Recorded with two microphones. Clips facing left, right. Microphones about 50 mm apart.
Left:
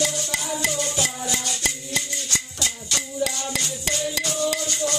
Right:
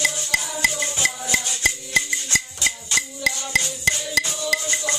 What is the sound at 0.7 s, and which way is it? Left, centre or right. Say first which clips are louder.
Music: right 1 dB; right.